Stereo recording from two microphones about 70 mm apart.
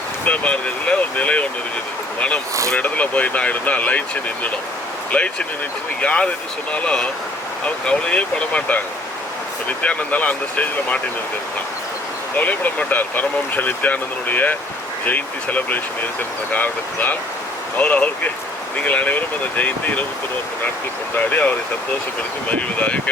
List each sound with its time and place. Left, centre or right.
0.3 s speech: centre
2.7 s speech: left
12.4 s speech: left
21.2 s speech: left